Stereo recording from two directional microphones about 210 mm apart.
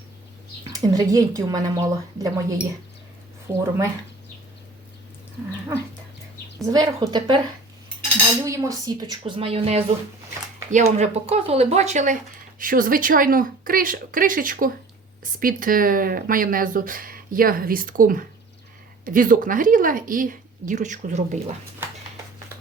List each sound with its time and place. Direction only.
0.9 s a woman's voice: 15° right (ahead or behind)
6.6 s a woman's voice: 15° right (ahead or behind)
8.4 s speech: 15° right (ahead or behind); by 21.5 s 35° right (ahead or behind)